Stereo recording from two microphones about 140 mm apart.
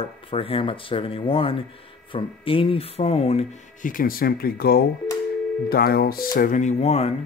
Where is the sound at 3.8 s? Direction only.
85° left.